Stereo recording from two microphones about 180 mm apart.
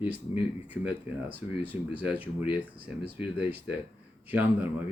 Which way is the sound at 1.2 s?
10° right (ahead or behind).